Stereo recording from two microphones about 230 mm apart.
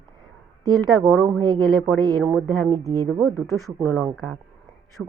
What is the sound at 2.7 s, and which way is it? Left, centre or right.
Speech, centre.